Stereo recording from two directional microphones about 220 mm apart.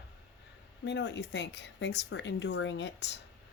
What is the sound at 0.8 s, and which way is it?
Speech, 50° left (ahead or behind).